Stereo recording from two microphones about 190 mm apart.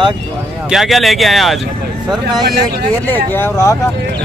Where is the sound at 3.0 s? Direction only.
10° left (ahead or behind).